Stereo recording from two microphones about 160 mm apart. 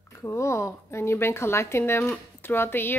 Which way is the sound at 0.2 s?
15° left (ahead or behind).